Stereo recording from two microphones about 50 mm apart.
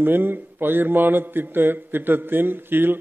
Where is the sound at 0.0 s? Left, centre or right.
Right.